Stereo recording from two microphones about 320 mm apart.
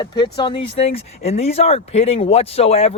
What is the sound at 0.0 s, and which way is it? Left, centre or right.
Speech, centre.